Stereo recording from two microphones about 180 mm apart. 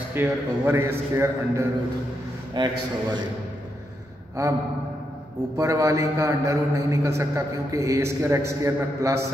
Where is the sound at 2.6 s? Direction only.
25° right (ahead or behind).